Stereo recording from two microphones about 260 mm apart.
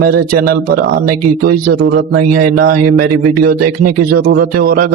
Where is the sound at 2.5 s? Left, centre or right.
Right.